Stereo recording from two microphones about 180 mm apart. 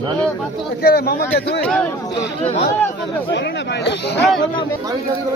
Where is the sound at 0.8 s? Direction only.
60° left (ahead or behind).